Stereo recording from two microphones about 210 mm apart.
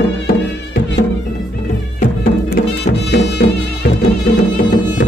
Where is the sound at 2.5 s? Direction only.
55° left (ahead or behind).